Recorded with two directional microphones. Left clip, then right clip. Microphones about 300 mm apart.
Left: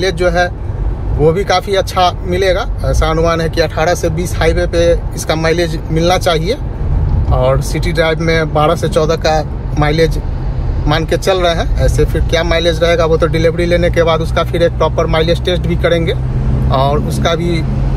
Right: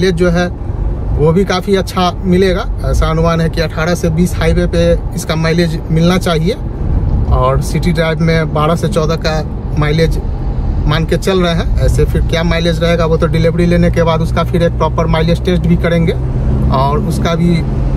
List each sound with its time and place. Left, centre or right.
0.0 s speech: centre